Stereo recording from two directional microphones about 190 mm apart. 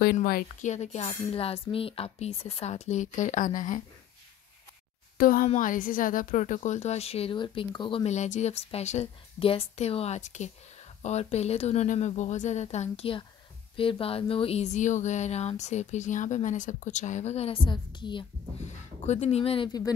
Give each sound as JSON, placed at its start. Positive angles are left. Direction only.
{"t": 0.0, "sound": "a woman's voice", "side_deg": 50}
{"t": 5.1, "sound": "a woman's voice", "side_deg": 50}
{"t": 19.0, "sound": "speech", "side_deg": 35}